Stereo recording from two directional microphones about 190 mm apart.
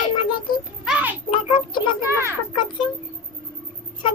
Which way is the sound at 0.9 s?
5° right (ahead or behind).